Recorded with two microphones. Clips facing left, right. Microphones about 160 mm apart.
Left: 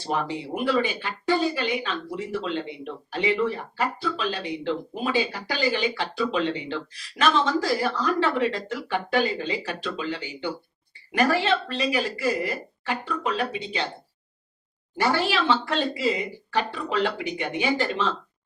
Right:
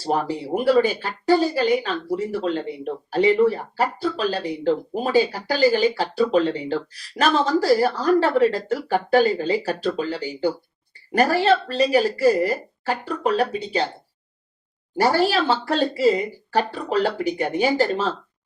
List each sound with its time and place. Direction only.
0.0 s speech: 40° right (ahead or behind)
14.9 s speech: 40° right (ahead or behind)